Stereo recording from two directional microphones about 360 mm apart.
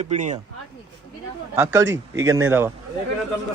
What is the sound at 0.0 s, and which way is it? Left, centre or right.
Speech, centre.